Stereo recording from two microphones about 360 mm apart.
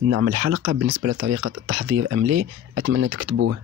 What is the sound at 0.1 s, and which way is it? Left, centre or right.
Speech, right.